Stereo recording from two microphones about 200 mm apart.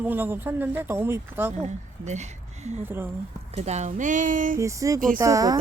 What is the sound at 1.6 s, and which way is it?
Speech, 35° right (ahead or behind).